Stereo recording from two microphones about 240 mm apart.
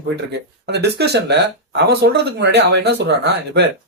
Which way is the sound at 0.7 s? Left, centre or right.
Right.